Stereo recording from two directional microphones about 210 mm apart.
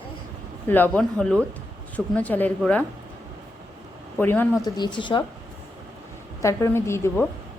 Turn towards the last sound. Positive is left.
turn(degrees=10)  # may be behind; listen again after turning